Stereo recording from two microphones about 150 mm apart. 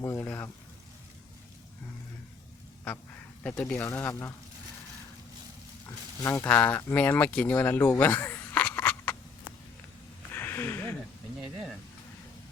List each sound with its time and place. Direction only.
0.0 s speech: 20° left (ahead or behind)
3.4 s speech: 10° left (ahead or behind)
6.2 s speech: 15° left (ahead or behind)
10.3 s a sound: 15° left (ahead or behind)